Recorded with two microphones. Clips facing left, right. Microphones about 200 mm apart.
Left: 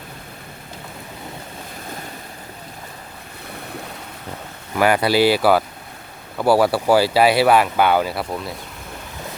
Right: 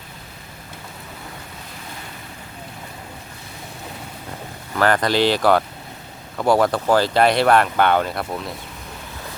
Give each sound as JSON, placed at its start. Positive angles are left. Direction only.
{"t": 4.7, "sound": "speech", "side_deg": 10}